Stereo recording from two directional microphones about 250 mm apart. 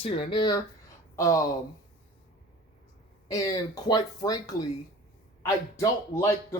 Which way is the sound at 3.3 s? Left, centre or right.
Centre.